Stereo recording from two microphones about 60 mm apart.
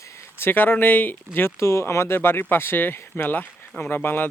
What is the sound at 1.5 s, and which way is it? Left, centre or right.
Speech, left.